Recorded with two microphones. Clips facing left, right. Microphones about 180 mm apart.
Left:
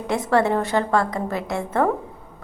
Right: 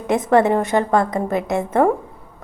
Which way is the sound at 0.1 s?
20° right (ahead or behind).